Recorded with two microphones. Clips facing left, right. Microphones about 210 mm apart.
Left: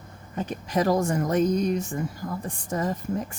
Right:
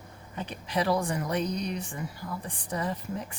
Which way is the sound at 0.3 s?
45° left (ahead or behind).